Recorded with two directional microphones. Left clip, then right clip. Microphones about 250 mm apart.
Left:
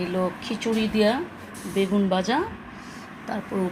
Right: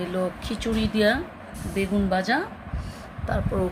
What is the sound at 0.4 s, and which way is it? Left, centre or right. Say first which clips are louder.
Speech: left 2 dB; centre.